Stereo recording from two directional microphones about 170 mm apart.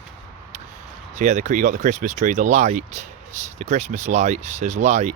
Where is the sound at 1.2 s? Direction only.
45° right (ahead or behind).